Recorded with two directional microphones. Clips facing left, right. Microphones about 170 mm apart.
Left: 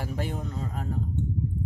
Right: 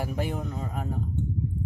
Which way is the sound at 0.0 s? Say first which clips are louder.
Right 2 dB; 15° right (ahead or behind).